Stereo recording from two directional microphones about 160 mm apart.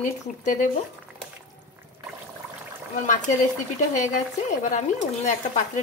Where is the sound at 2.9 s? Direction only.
55° left (ahead or behind).